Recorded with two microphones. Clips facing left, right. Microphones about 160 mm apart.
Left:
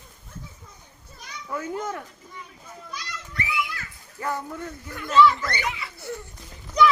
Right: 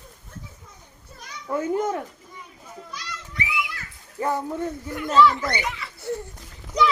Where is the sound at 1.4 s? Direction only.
25° right (ahead or behind).